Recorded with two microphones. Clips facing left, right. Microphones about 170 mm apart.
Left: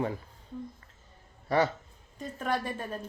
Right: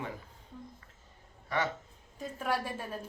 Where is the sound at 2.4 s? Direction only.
5° right (ahead or behind).